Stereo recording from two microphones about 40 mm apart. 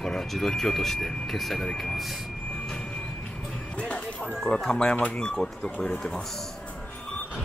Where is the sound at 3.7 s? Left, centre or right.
Left.